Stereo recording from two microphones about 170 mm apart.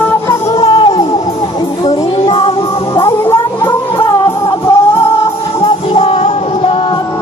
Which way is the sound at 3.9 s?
25° left (ahead or behind).